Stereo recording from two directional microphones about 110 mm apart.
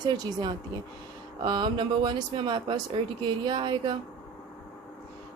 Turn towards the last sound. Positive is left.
turn(degrees=-45)  # may be behind; listen again after turning